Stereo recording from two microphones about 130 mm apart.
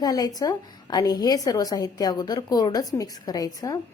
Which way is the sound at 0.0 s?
30° left (ahead or behind).